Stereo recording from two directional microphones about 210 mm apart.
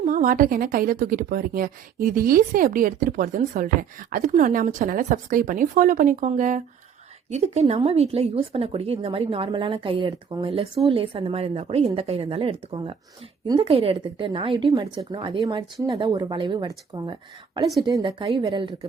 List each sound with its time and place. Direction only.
0.0 s a woman's voice: 40° right (ahead or behind); by 18.9 s 25° right (ahead or behind)